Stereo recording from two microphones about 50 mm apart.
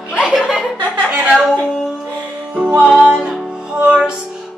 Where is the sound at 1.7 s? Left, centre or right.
Centre.